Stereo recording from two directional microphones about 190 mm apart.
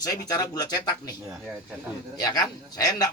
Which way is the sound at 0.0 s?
20° left (ahead or behind).